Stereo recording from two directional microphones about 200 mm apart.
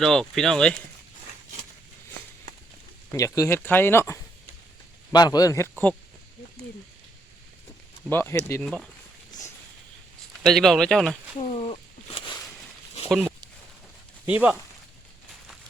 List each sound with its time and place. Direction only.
0.0 s speech: centre (ahead or behind)
3.1 s speech: 15° left (ahead or behind)
8.0 s speech: 10° left (ahead or behind)
8.6 s speech: centre (ahead or behind)
10.4 s speech: centre (ahead or behind)
11.3 s a sound: 30° left (ahead or behind)
13.1 s a sound: centre (ahead or behind)
14.3 s speech: 5° right (ahead or behind)